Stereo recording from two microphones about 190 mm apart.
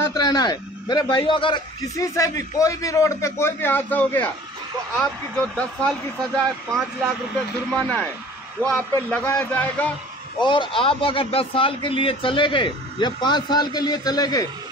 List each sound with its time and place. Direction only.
0.1 s a man's voice: 20° left (ahead or behind)
5.3 s a man's voice: 5° left (ahead or behind)
10.4 s speech: 25° left (ahead or behind)